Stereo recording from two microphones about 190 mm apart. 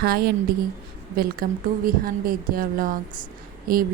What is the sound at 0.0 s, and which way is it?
Speech, 55° right (ahead or behind).